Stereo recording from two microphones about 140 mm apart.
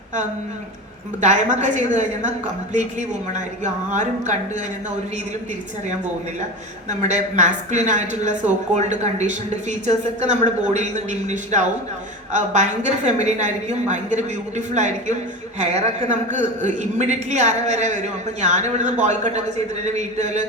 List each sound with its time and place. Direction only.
1.2 s a man's voice: 60° right (ahead or behind)
7.0 s a man's voice: 60° right (ahead or behind)